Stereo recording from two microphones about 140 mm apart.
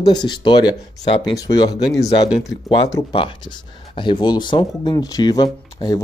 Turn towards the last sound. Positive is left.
turn(degrees=30)  # may be behind; listen again after turning